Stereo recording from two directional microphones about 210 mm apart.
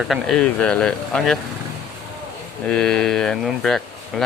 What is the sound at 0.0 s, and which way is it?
Speech, centre (ahead or behind).